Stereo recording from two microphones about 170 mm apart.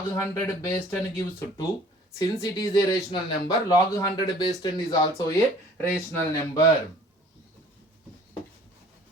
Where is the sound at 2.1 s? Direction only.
20° left (ahead or behind).